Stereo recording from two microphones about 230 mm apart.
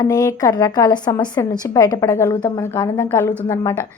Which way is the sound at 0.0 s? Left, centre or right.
Centre.